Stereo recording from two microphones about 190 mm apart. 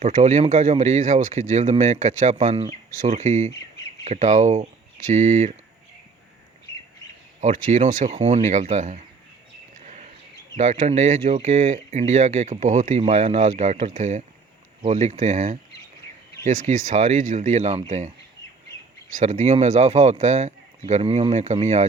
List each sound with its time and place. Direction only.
0.0 s speech: 35° right (ahead or behind)
7.4 s speech: 35° right (ahead or behind)
9.8 s bird: 40° right (ahead or behind)
10.6 s speech: 35° right (ahead or behind)
19.1 s speech: 40° right (ahead or behind)